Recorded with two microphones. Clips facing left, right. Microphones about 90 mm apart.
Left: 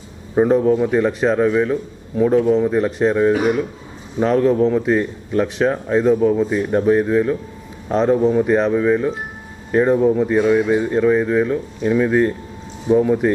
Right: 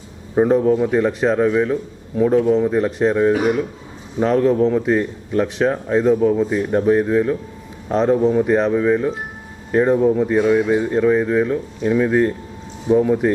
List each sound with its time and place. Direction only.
0.3 s a man's voice: 25° left (ahead or behind)